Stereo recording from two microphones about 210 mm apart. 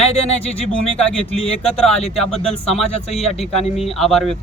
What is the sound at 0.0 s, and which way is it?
Speech, 30° left (ahead or behind).